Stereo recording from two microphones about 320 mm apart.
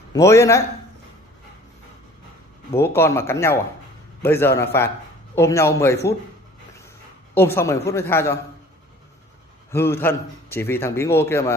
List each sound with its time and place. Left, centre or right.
0.1 s a man's voice: centre
2.7 s a man's voice: centre
7.3 s a man's voice: centre
9.7 s a man's voice: centre